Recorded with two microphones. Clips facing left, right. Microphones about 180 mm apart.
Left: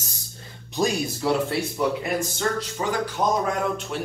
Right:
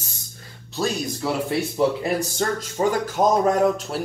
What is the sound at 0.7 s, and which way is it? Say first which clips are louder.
Speech: left 2 dB; 15° left (ahead or behind).